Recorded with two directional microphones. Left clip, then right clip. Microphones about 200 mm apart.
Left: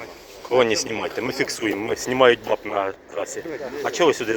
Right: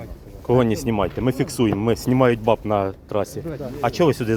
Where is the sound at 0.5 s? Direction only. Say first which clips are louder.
Even; 15° right (ahead or behind).